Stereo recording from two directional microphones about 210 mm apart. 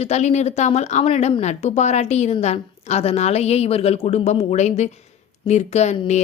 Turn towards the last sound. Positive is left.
turn(degrees=30)  # may be behind; listen again after turning